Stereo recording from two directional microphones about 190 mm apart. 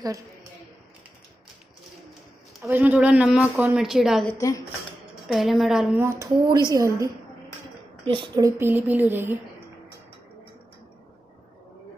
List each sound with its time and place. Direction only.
0.0 s a woman's voice: 15° right (ahead or behind)
2.6 s a woman's voice: 10° right (ahead or behind)
4.3 s speech: 15° left (ahead or behind)
5.3 s a woman's voice: centre (ahead or behind)
5.9 s a woman's voice: 15° right (ahead or behind)